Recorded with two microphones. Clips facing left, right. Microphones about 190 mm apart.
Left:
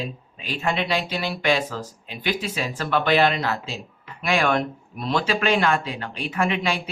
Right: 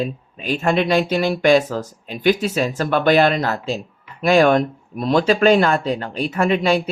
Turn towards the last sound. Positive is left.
turn(degrees=-40)  # may be behind; listen again after turning